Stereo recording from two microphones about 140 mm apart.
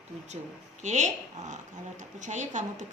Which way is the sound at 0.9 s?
60° right (ahead or behind).